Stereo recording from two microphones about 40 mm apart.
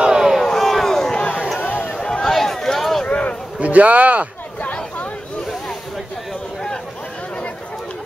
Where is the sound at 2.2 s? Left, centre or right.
Centre.